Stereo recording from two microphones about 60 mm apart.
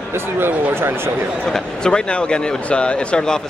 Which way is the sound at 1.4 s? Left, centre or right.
Centre.